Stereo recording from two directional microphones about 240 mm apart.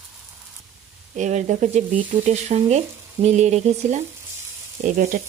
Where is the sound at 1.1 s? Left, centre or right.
Right.